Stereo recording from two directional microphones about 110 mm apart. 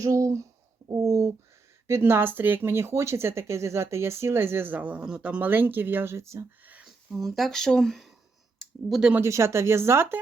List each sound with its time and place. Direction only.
0.0 s speech: 30° right (ahead or behind)
6.8 s speech: centre (ahead or behind)
9.2 s speech: 25° right (ahead or behind)